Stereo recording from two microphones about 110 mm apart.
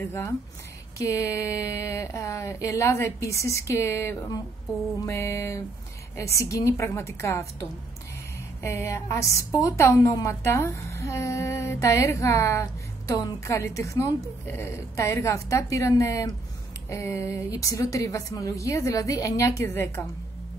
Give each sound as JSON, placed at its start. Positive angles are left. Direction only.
{"t": 0.0, "sound": "a woman's voice", "side_deg": 25}
{"t": 8.6, "sound": "a woman's voice", "side_deg": 25}